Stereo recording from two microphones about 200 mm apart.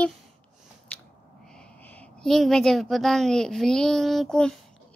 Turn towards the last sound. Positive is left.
turn(degrees=5)  # may be behind; listen again after turning